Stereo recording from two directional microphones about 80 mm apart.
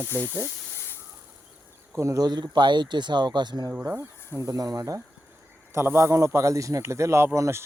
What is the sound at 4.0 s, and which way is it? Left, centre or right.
Speech, right.